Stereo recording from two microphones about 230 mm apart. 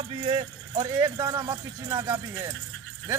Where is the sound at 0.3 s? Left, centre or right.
Centre.